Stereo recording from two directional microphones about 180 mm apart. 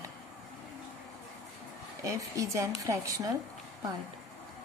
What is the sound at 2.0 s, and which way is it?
Speech, 15° right (ahead or behind).